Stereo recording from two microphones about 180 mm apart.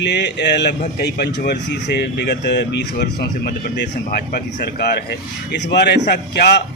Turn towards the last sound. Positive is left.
turn(degrees=70)  # may be behind; listen again after turning